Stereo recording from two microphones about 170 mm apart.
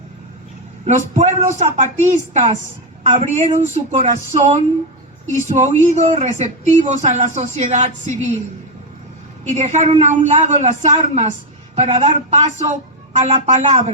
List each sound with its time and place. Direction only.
0.9 s a man's voice: 45° right (ahead or behind)
9.4 s a man's voice: 45° right (ahead or behind)